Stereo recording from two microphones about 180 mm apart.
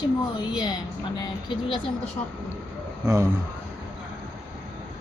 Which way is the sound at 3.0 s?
15° right (ahead or behind).